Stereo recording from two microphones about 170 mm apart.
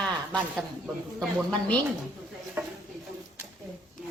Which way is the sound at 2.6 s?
10° right (ahead or behind).